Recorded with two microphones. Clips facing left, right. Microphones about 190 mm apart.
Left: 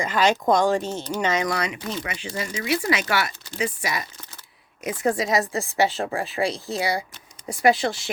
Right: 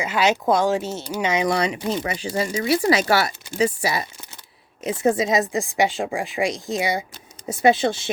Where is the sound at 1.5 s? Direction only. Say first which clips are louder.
Right 5 dB; 30° right (ahead or behind).